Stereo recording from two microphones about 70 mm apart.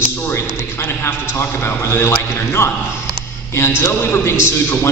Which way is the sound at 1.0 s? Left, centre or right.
Left.